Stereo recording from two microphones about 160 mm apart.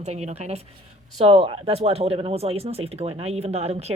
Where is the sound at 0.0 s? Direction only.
45° right (ahead or behind).